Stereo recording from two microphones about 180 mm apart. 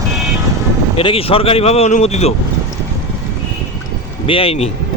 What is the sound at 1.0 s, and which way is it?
Speech, 30° left (ahead or behind).